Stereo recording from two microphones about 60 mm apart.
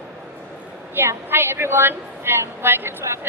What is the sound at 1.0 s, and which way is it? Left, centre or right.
A woman's voice, right.